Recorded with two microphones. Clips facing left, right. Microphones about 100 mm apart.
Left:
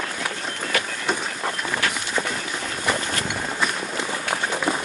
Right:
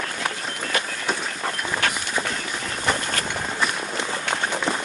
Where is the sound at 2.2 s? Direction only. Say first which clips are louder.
Even; 5° left (ahead or behind).